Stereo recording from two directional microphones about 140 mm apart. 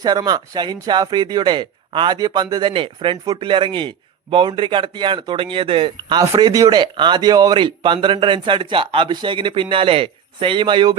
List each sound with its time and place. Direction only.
0.0 s speech: 30° right (ahead or behind)